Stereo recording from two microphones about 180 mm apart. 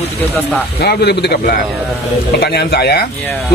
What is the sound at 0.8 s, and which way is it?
Speech, 65° left (ahead or behind).